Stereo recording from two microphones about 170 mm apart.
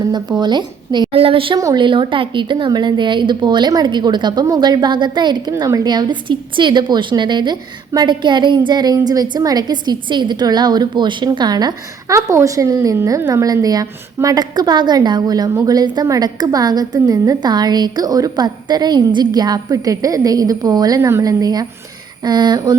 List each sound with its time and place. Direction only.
0.1 s a woman's voice: 25° right (ahead or behind)